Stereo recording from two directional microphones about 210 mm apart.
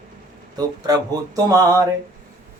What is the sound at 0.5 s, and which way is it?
Mantra, 20° right (ahead or behind).